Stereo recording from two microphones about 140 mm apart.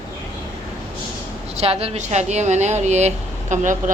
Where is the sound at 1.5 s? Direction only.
45° right (ahead or behind).